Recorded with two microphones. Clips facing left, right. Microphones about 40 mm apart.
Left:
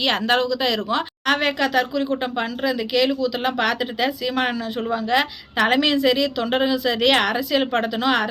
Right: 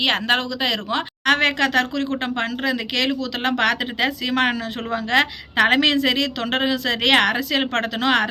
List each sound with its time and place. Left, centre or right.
0.0 s a woman's voice: right
1.4 s speech: right